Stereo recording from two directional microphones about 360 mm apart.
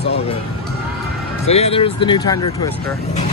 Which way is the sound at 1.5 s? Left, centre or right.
Centre.